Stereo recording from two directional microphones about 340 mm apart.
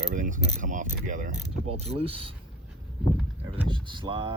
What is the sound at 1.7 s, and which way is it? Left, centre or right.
Speech, centre.